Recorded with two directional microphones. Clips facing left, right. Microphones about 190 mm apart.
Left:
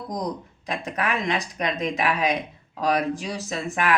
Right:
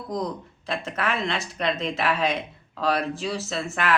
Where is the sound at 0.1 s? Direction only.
15° left (ahead or behind).